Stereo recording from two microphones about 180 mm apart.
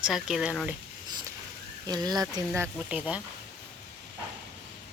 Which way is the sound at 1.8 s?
20° right (ahead or behind).